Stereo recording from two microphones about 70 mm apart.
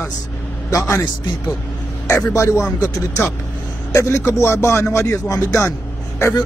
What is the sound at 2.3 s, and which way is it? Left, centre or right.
Speech, left.